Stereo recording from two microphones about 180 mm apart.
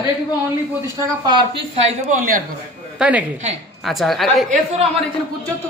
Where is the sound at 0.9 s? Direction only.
20° right (ahead or behind).